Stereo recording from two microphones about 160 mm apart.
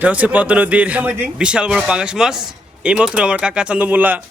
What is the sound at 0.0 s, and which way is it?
A man's voice, 10° right (ahead or behind).